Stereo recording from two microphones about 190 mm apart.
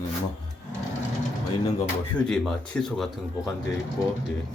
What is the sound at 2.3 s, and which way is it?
Speech, 5° left (ahead or behind).